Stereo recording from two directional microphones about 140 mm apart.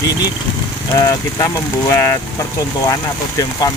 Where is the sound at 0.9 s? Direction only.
25° left (ahead or behind).